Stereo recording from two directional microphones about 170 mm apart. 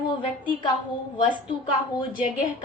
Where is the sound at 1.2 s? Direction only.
30° left (ahead or behind).